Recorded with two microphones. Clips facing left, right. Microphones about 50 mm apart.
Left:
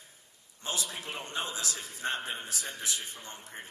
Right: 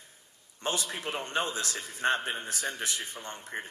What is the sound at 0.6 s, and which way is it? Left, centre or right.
A man's voice, right.